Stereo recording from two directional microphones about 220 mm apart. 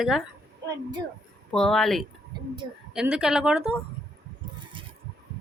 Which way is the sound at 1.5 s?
5° left (ahead or behind).